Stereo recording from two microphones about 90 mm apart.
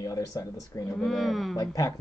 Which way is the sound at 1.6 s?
40° left (ahead or behind).